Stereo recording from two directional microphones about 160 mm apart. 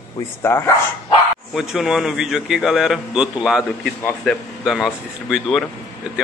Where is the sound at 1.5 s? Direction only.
Centre (ahead or behind).